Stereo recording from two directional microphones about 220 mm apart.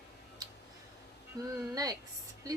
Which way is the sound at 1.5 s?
15° right (ahead or behind).